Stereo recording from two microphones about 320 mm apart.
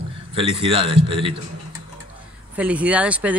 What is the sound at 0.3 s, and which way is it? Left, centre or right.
A man's voice, centre.